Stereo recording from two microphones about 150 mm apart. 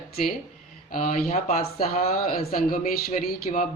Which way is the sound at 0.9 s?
55° left (ahead or behind).